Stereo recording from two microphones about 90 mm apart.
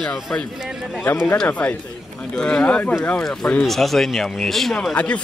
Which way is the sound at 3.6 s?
Centre (ahead or behind).